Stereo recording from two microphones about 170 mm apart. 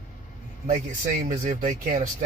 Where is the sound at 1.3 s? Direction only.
55° right (ahead or behind).